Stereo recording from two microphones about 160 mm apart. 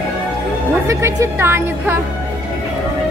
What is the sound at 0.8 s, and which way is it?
A woman's voice, 15° right (ahead or behind).